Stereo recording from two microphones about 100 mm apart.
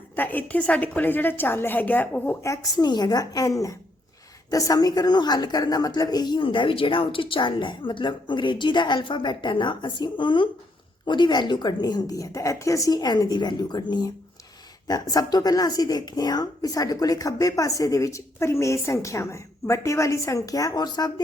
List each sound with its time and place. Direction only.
0.2 s a woman's voice: 15° left (ahead or behind)
2.8 s a woman's voice: 45° left (ahead or behind)
14.8 s speech: 40° left (ahead or behind)